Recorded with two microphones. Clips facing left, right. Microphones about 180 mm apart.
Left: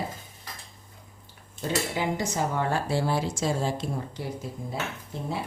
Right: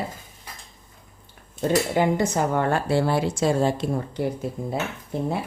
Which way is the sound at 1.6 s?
50° right (ahead or behind).